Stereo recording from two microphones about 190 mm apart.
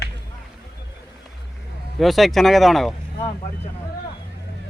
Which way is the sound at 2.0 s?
Centre (ahead or behind).